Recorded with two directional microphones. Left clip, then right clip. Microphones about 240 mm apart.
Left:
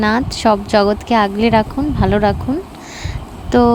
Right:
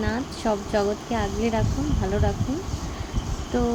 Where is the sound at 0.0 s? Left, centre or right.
Left.